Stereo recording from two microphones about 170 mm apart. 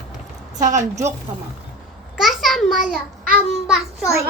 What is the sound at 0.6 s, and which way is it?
Speech, 45° right (ahead or behind).